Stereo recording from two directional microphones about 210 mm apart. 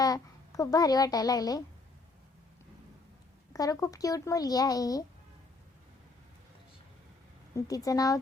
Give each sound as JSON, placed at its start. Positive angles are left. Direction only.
{"t": 0.0, "sound": "a child's voice", "side_deg": 15}
{"t": 3.5, "sound": "speech", "side_deg": 15}
{"t": 7.5, "sound": "speech", "side_deg": 15}